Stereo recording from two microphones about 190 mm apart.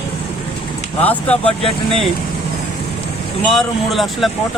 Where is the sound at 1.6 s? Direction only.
30° left (ahead or behind).